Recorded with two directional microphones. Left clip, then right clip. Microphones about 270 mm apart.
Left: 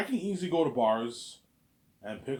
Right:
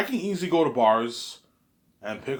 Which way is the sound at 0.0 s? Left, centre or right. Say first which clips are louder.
Right 5 dB; centre.